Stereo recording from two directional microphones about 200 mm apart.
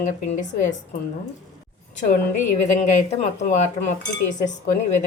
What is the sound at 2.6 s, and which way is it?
Speech, 35° left (ahead or behind).